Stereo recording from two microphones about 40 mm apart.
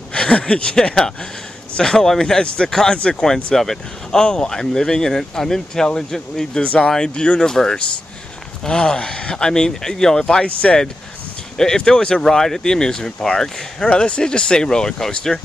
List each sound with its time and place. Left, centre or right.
0.1 s speech: left
2.7 s speech: centre
4.2 s speech: left
6.6 s speech: left
6.9 s speech: left
8.6 s speech: left
10.4 s speech: left
11.5 s speech: centre
13.8 s speech: left; by 15.3 s centre